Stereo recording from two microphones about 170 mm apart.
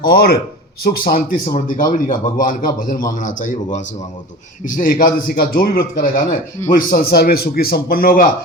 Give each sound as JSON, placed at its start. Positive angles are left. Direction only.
{"t": 0.0, "sound": "a man's voice", "side_deg": 60}